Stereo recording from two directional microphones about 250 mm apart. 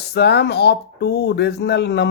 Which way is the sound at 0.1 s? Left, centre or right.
Left.